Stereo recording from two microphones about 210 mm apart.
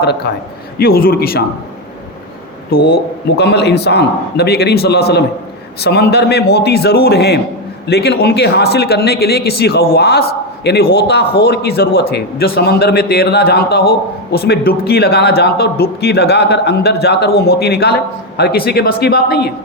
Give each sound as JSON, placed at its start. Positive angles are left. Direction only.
{"t": 0.0, "sound": "speech", "side_deg": 50}
{"t": 2.6, "sound": "speech", "side_deg": 45}